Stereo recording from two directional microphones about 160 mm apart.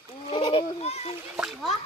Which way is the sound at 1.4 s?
Centre (ahead or behind).